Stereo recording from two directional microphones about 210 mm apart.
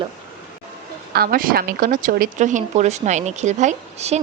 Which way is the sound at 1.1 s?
45° right (ahead or behind).